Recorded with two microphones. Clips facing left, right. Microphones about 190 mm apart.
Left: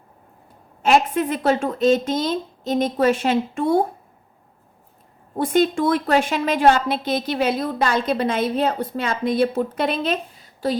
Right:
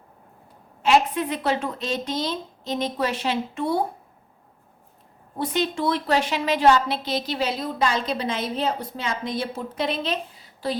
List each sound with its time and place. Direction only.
0.8 s a woman's voice: 45° left (ahead or behind)
5.4 s a woman's voice: 50° left (ahead or behind)